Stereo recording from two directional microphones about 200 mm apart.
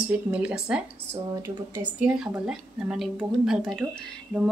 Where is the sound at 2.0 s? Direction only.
5° right (ahead or behind).